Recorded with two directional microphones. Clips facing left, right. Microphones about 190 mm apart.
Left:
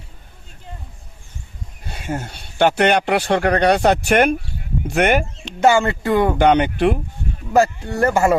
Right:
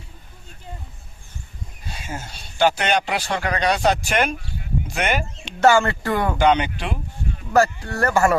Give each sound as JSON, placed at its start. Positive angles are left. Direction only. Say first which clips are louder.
{"t": 1.8, "sound": "speech", "louder": "left 7 dB", "side_deg": 60}
{"t": 5.6, "sound": "speech", "louder": "left 1 dB", "side_deg": 20}
{"t": 6.3, "sound": "speech", "louder": "left 3 dB", "side_deg": 55}
{"t": 7.5, "sound": "speech", "louder": "left 2 dB", "side_deg": 15}